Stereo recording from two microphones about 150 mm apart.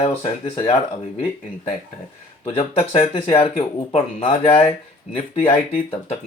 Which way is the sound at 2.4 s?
40° left (ahead or behind).